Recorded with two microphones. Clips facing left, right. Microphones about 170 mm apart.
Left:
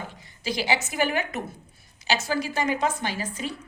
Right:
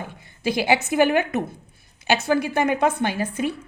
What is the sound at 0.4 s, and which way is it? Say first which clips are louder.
A woman's voice: right 6 dB; 55° right (ahead or behind).